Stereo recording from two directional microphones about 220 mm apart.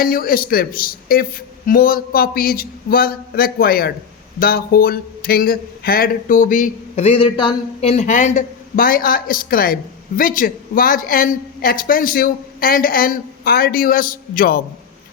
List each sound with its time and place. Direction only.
0.0 s speech: 40° left (ahead or behind)